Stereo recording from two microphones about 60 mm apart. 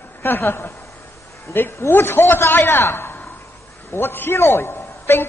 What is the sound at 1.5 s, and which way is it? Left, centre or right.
A man's voice, left.